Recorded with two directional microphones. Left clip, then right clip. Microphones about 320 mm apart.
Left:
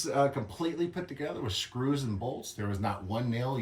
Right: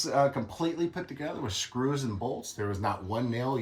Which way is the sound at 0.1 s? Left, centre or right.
Centre.